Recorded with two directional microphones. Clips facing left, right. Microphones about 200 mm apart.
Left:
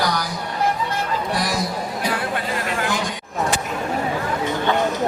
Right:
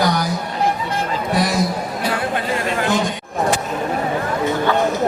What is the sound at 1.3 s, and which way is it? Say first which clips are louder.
Chatter: right 8 dB; 20° right (ahead or behind).